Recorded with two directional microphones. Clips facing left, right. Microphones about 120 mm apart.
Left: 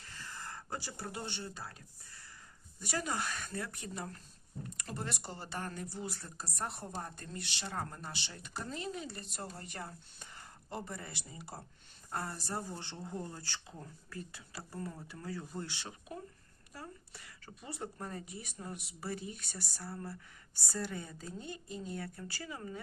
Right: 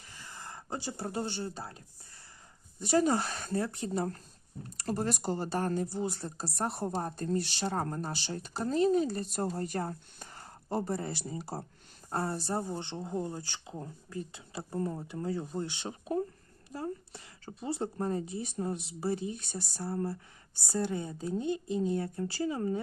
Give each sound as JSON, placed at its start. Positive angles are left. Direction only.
{"t": 0.0, "sound": "a sound", "side_deg": -15}
{"t": 2.8, "sound": "a woman's voice", "side_deg": -30}
{"t": 15.9, "sound": "a woman's voice", "side_deg": -30}